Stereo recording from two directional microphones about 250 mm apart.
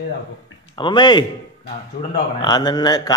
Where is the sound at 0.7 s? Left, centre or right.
Centre.